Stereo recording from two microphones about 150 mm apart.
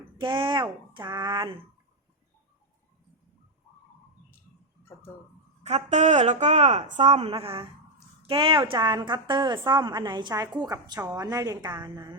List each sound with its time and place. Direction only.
0.2 s speech: 35° right (ahead or behind)
5.6 s a woman's voice: 50° right (ahead or behind); by 12.1 s 25° right (ahead or behind)